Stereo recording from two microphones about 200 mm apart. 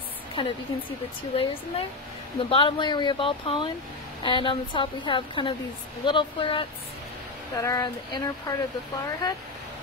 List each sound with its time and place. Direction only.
0.4 s speech: 25° left (ahead or behind)